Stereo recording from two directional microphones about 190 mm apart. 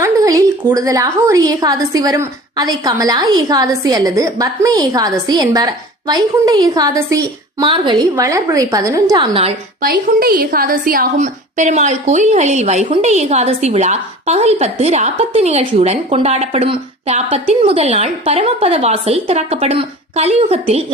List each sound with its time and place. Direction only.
0.0 s a woman's voice: 15° right (ahead or behind)
9.8 s a woman's voice: 50° right (ahead or behind); by 20.8 s 30° right (ahead or behind)